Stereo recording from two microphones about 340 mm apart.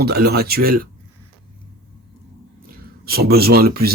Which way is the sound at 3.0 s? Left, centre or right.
Right.